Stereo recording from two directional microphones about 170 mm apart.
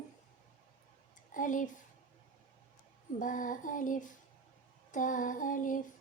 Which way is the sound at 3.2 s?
50° left (ahead or behind).